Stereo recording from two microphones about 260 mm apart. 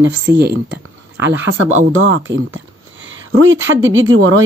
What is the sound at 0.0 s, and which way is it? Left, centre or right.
Speech, right.